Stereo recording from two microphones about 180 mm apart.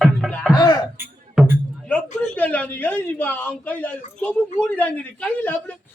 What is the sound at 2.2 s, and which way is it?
A man's voice, 10° left (ahead or behind).